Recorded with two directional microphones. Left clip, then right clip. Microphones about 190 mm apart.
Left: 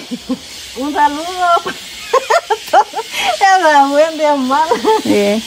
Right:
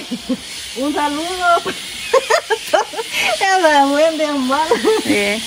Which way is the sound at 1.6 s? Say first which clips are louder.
Even; 20° left (ahead or behind).